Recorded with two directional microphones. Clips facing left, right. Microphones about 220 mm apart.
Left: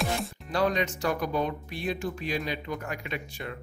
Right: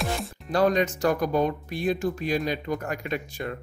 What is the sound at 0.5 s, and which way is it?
Speech, 45° right (ahead or behind).